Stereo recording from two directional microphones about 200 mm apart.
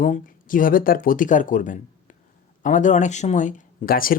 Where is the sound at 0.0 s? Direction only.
40° left (ahead or behind).